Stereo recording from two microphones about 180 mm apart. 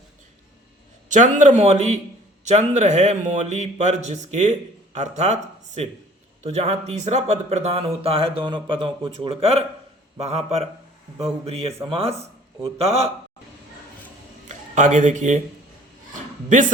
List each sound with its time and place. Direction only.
1.0 s speech: 45° right (ahead or behind)
14.4 s speech: 45° right (ahead or behind)
16.5 s speech: 45° right (ahead or behind)